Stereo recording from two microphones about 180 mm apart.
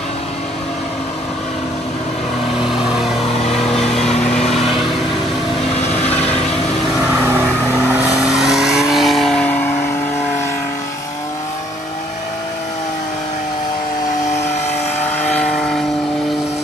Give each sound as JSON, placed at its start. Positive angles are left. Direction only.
{"t": 2.6, "sound": "vehicle", "side_deg": -5}
{"t": 4.1, "sound": "vehicle", "side_deg": 35}
{"t": 4.6, "sound": "vehicle", "side_deg": 0}
{"t": 8.2, "sound": "vehicle", "side_deg": 0}
{"t": 15.3, "sound": "vehicle", "side_deg": 5}